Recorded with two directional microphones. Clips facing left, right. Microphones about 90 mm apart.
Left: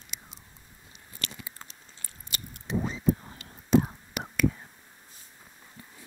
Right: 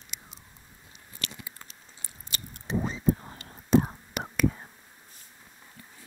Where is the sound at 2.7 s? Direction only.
35° right (ahead or behind).